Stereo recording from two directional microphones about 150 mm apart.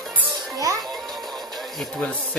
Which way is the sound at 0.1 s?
Centre (ahead or behind).